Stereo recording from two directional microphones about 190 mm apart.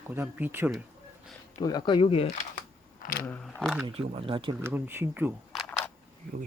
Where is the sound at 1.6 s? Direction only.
20° left (ahead or behind).